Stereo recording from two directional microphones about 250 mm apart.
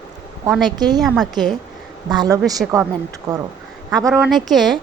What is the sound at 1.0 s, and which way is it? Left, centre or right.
Speech, centre.